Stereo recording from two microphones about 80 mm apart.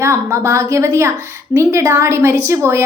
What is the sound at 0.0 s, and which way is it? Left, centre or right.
A woman's voice, right.